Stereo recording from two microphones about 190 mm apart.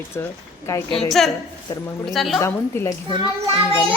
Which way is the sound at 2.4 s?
15° left (ahead or behind).